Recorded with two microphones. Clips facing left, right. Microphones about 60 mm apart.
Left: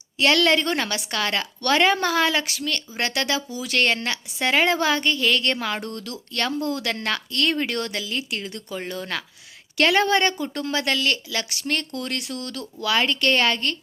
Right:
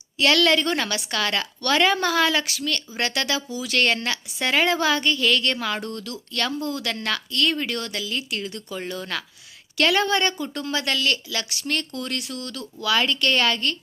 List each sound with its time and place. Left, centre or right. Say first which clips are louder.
0.2 s a woman's voice: even; left
6.6 s speech: left 2 dB; left
8.0 s a woman's voice: even; left
11.9 s speech: left 1 dB; left